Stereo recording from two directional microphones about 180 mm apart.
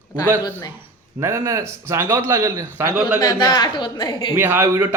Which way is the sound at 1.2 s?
15° right (ahead or behind).